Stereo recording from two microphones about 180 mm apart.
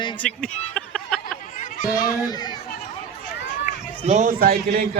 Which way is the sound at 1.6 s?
45° left (ahead or behind).